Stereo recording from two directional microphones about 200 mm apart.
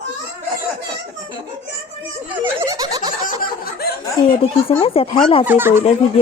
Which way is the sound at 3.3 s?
45° left (ahead or behind).